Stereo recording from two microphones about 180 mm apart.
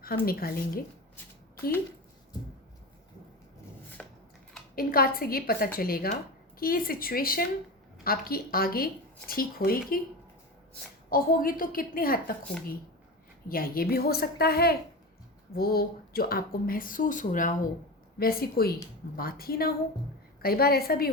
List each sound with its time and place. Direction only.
0.0 s speech: 55° left (ahead or behind)
4.0 s a sound: 5° left (ahead or behind)
4.7 s speech: 55° left (ahead or behind)
11.1 s speech: 50° left (ahead or behind)